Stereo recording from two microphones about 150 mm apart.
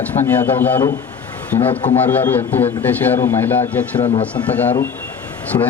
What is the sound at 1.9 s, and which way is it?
A man's voice, 10° left (ahead or behind).